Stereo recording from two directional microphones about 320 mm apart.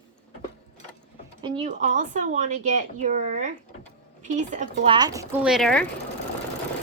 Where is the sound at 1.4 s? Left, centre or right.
Centre.